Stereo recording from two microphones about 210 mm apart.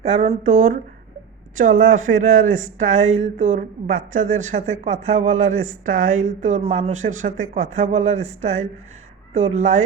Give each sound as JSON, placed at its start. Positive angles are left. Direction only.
{"t": 0.0, "sound": "speech", "side_deg": -30}